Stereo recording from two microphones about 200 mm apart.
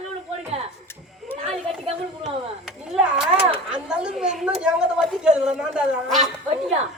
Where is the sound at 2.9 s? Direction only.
Centre (ahead or behind).